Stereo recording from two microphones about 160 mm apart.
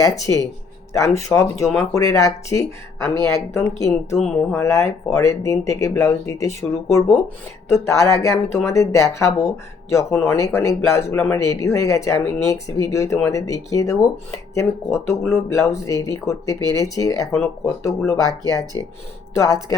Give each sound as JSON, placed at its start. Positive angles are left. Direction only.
{"t": 0.0, "sound": "speech", "side_deg": 20}
{"t": 18.3, "sound": "speech", "side_deg": -25}